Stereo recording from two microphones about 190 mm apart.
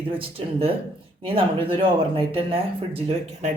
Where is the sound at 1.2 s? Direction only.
30° right (ahead or behind).